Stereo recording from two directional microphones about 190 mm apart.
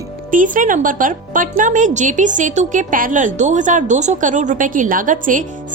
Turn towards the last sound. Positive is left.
turn(degrees=-45)  # may be behind; listen again after turning